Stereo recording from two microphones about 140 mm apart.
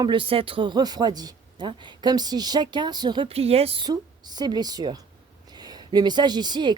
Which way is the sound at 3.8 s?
30° right (ahead or behind).